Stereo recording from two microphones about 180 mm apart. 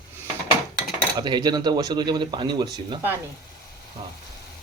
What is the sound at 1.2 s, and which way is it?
Speech, 25° right (ahead or behind).